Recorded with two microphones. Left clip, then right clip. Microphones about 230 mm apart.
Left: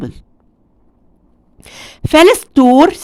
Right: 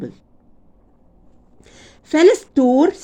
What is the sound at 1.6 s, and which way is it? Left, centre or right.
A woman's voice, left.